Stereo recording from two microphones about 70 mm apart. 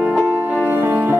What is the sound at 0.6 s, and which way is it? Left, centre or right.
Music, right.